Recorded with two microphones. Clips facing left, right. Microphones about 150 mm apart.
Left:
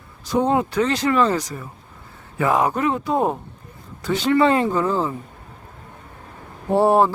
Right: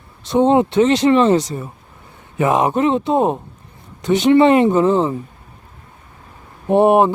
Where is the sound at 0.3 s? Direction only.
25° right (ahead or behind).